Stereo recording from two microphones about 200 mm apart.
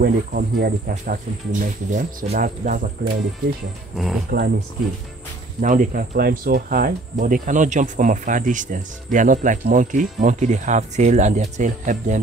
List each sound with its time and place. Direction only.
0.0 s speech: 50° right (ahead or behind)
3.9 s speech: centre (ahead or behind)
5.6 s speech: 40° right (ahead or behind)